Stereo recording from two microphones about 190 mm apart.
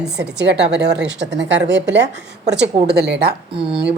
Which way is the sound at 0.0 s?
60° right (ahead or behind).